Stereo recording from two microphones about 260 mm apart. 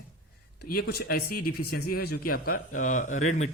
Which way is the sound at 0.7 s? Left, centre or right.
Left.